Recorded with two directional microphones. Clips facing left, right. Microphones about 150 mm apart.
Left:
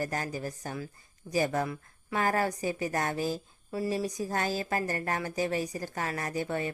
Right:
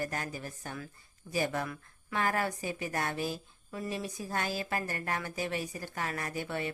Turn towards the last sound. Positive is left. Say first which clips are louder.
# left 4 dB
turn(degrees=40)  # may be behind; listen again after turning